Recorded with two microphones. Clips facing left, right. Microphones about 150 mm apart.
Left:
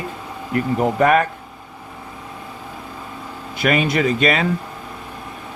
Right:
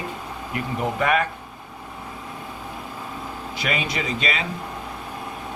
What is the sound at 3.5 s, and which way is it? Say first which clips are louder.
Speech: left 9 dB; 55° left (ahead or behind).